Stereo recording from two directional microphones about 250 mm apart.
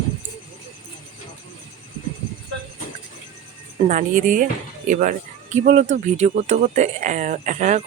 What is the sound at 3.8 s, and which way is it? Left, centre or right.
A woman's voice, right.